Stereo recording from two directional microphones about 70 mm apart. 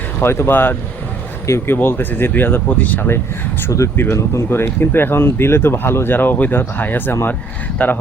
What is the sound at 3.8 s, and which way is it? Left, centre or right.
Speech, left.